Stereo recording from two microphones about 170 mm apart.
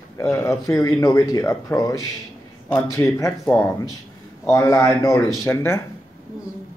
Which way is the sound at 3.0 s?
15° left (ahead or behind).